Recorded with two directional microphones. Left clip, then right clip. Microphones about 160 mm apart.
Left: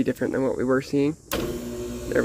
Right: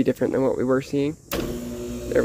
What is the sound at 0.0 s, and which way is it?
Speech, 15° right (ahead or behind).